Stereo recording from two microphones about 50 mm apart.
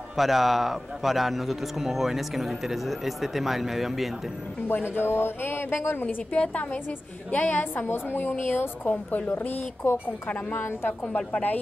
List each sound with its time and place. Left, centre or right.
0.1 s a man's voice: centre
4.9 s speech: left
6.0 s a woman's voice: left
11.1 s a woman's voice: left